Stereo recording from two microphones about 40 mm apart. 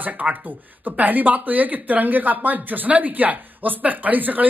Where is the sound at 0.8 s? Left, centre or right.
Right.